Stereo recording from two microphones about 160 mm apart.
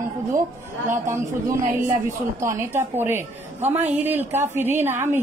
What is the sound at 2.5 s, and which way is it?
A woman's voice, 15° right (ahead or behind).